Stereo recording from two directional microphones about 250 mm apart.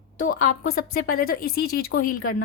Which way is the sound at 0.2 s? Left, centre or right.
Left.